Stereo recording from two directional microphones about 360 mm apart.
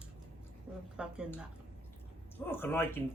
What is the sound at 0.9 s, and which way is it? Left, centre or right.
A woman's voice, centre.